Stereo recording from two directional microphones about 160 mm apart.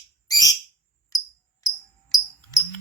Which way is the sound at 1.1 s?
20° left (ahead or behind).